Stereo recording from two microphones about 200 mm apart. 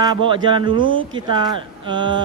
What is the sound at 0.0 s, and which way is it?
Speech, 25° right (ahead or behind).